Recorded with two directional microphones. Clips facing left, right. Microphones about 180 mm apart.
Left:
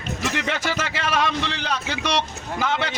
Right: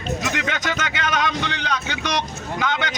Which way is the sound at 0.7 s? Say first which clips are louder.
Right 1 dB; 30° left (ahead or behind).